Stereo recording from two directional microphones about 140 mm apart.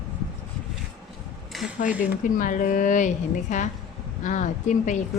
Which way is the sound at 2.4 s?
65° left (ahead or behind).